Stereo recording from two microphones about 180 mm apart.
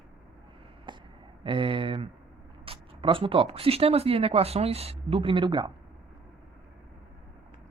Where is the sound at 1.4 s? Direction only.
30° right (ahead or behind).